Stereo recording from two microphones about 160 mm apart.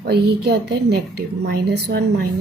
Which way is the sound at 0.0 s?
85° right.